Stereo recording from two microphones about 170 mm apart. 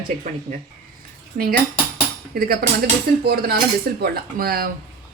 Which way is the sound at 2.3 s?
65° right (ahead or behind).